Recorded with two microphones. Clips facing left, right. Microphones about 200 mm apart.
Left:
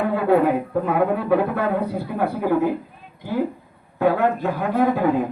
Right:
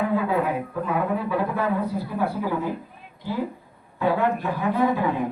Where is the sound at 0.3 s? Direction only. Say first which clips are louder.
Left 7 dB; 60° left (ahead or behind).